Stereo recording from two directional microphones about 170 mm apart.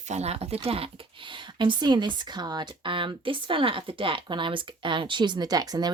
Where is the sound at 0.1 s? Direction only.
40° right (ahead or behind).